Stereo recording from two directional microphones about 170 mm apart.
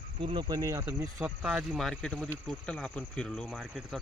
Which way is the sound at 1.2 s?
5° right (ahead or behind).